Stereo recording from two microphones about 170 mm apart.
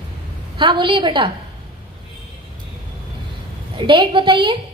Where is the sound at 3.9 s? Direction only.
30° right (ahead or behind).